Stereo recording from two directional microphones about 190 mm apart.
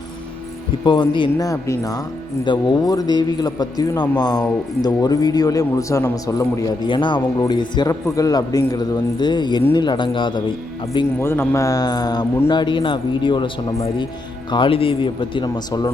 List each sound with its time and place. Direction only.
0.9 s a man's voice: 25° left (ahead or behind)
11.2 s a man's voice: 10° left (ahead or behind)